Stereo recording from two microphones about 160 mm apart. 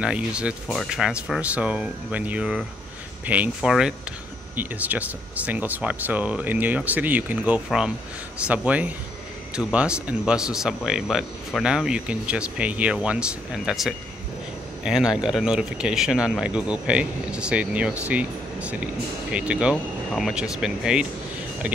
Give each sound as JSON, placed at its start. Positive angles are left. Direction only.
{"t": 0.0, "sound": "a man's voice", "side_deg": -5}